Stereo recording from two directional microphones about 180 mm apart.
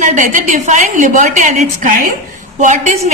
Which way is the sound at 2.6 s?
45° right (ahead or behind).